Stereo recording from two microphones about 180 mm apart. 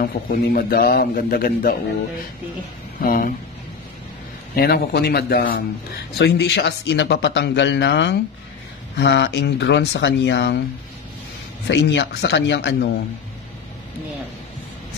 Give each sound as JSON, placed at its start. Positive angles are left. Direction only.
{"t": 0.0, "sound": "a man's voice", "side_deg": 55}
{"t": 3.0, "sound": "speech", "side_deg": 50}
{"t": 4.6, "sound": "a man's voice", "side_deg": 60}
{"t": 11.6, "sound": "speech", "side_deg": 75}